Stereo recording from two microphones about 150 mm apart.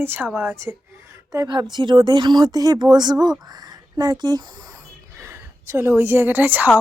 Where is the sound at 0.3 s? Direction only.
Centre (ahead or behind).